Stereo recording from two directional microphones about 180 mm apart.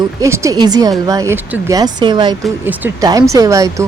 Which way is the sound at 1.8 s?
25° right (ahead or behind).